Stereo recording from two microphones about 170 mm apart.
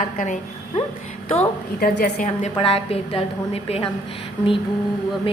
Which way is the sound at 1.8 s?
70° left (ahead or behind).